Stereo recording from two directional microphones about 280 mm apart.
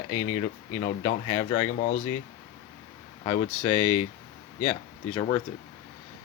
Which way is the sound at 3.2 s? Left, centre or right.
Left.